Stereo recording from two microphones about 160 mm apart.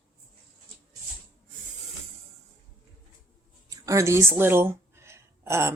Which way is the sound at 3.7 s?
20° right (ahead or behind).